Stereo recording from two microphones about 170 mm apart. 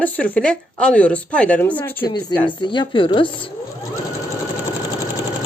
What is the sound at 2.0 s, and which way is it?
Speech, 25° left (ahead or behind).